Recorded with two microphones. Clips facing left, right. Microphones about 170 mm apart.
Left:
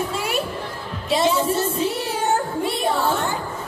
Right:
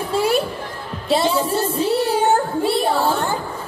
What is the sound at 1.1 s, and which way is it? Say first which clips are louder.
Speech: right 1 dB; 35° right (ahead or behind).